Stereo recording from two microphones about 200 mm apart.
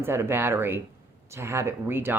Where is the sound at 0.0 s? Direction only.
10° right (ahead or behind).